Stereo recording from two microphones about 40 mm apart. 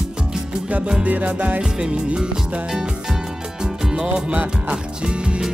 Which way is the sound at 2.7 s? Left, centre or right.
Centre.